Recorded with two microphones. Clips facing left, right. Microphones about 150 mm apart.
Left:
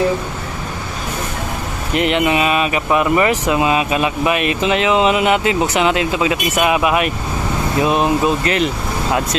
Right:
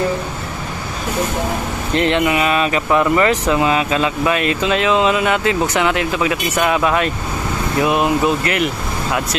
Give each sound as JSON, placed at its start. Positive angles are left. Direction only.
{"t": 2.0, "sound": "speech", "side_deg": 15}